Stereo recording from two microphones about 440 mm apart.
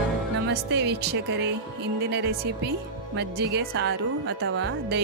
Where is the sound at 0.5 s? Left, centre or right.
Right.